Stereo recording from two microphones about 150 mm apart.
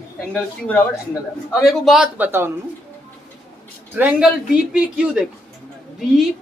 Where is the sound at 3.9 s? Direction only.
10° right (ahead or behind).